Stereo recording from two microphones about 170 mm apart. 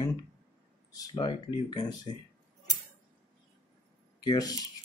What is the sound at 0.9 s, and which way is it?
Speech, 20° left (ahead or behind).